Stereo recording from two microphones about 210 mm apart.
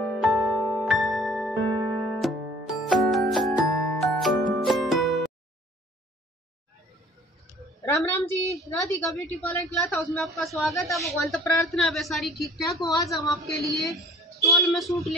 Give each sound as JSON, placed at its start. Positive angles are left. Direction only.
{"t": 0.0, "sound": "music", "side_deg": 0}
{"t": 0.6, "sound": "music", "side_deg": 15}
{"t": 0.8, "sound": "music", "side_deg": 0}
{"t": 7.8, "sound": "a woman's voice", "side_deg": 15}
{"t": 12.7, "sound": "speech", "side_deg": 15}
{"t": 13.7, "sound": "a woman's voice", "side_deg": 0}